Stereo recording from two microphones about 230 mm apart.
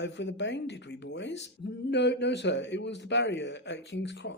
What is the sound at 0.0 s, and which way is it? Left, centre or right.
Speech, left.